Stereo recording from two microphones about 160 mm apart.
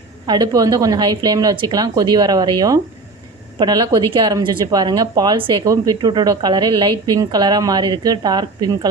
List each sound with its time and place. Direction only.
0.3 s speech: 25° right (ahead or behind)